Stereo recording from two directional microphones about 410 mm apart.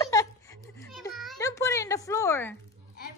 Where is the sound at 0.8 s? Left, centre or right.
Centre.